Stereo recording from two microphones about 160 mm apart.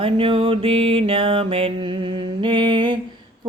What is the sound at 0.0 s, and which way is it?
Mantra, 35° right (ahead or behind).